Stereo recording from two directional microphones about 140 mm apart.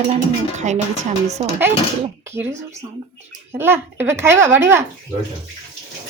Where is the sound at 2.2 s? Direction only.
20° right (ahead or behind).